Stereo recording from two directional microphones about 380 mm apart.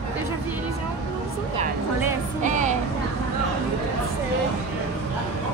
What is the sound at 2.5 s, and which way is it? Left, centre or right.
Vehicle, centre.